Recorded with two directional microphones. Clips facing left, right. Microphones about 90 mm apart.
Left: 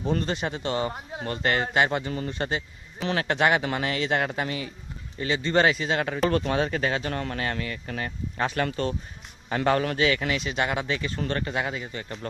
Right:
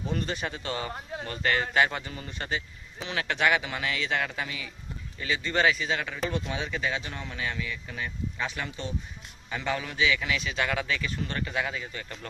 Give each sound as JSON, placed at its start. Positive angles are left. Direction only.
{"t": 0.0, "sound": "speech", "side_deg": 35}
{"t": 6.2, "sound": "speech", "side_deg": 55}